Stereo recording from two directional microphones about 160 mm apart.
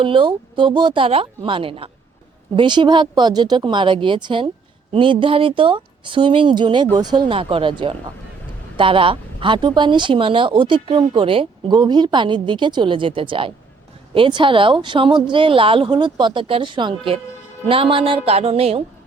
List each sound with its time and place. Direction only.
0.0 s speech: 30° right (ahead or behind)